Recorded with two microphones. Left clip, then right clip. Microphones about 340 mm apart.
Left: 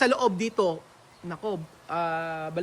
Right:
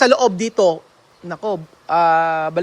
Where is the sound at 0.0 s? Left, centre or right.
Centre.